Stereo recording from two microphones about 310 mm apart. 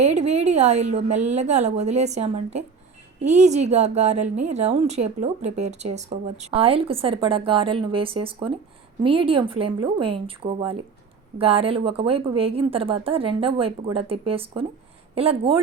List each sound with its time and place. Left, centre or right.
0.0 s speech: right
5.4 s speech: right
5.6 s a woman's voice: right